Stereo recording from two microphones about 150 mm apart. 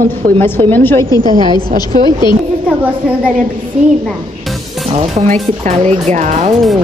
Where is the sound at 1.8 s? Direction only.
30° left (ahead or behind).